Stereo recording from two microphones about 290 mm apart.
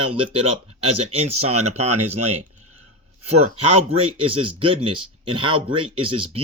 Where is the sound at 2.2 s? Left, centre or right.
Right.